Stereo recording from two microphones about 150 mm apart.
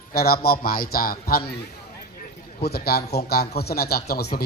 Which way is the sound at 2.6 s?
90° left.